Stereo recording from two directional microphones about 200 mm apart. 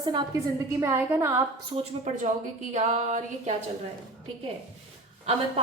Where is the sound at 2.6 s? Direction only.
35° right (ahead or behind).